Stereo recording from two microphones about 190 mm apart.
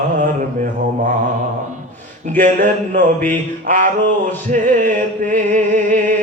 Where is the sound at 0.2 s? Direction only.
40° right (ahead or behind).